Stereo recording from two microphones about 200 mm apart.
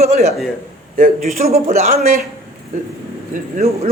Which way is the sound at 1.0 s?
45° right (ahead or behind).